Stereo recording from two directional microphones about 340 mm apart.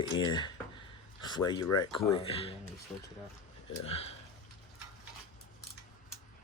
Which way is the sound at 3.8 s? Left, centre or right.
Centre.